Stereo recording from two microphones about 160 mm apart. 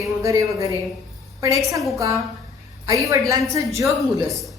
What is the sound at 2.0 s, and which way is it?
A woman's voice, 20° right (ahead or behind).